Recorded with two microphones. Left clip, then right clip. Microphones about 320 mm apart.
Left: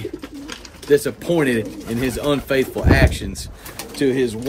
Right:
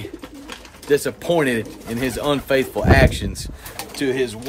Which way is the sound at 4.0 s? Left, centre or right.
Centre.